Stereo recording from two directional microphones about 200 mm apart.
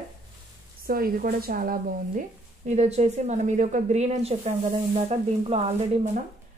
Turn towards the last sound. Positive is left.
turn(degrees=-30)  # may be behind; listen again after turning